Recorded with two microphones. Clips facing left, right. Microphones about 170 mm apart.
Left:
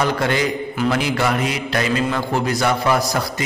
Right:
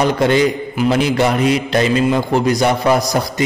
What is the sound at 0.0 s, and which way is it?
A man's voice, 20° right (ahead or behind).